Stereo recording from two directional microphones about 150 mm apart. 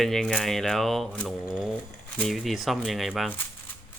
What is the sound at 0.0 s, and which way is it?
Speech, 5° left (ahead or behind).